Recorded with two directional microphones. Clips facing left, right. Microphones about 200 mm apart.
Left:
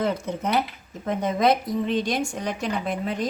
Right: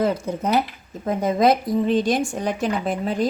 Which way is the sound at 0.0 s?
30° right (ahead or behind).